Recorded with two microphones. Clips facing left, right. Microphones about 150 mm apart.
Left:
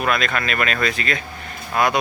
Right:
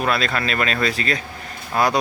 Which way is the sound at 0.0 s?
30° right (ahead or behind).